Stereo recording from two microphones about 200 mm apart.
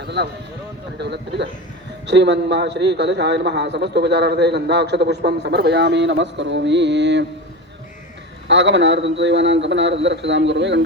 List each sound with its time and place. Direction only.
0.0 s a man's voice: 55° right (ahead or behind)
8.4 s a man's voice: 65° right (ahead or behind)